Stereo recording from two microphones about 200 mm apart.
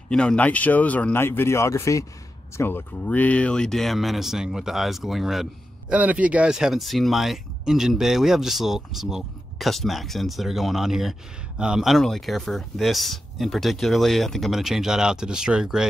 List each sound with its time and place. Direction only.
0.1 s speech: 5° left (ahead or behind)